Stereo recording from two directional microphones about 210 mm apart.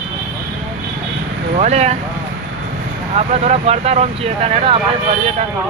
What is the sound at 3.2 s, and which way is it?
Speech, 30° right (ahead or behind).